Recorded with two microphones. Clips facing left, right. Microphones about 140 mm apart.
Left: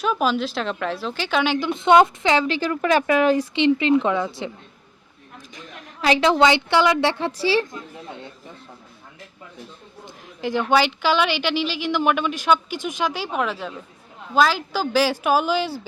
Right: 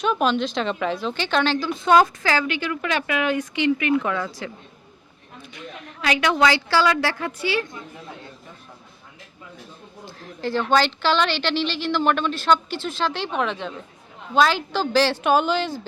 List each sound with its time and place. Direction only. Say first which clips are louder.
0.0 s a woman's voice: even; 5° left (ahead or behind)
1.5 s speech: left 3 dB; 20° left (ahead or behind)
2.6 s speech: left 5 dB; 40° left (ahead or behind)
5.5 s speech: left 1 dB; 30° left (ahead or behind)
10.4 s speech: left 1 dB; 15° left (ahead or behind)